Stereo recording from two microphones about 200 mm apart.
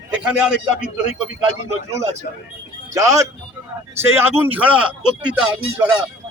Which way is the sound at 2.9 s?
15° right (ahead or behind).